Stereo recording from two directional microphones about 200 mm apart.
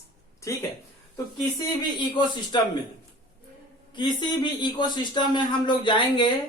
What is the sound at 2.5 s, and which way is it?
Speech, 25° left (ahead or behind).